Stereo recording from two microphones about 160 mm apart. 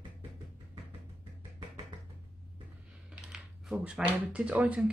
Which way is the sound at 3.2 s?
5° right (ahead or behind).